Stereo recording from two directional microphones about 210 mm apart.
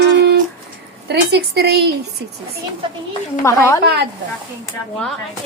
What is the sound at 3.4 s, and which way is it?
Speech, 15° left (ahead or behind).